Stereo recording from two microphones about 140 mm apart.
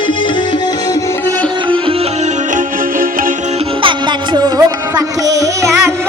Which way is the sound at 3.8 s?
35° right (ahead or behind).